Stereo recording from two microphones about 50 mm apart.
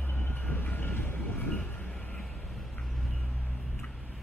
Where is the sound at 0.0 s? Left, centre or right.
Left.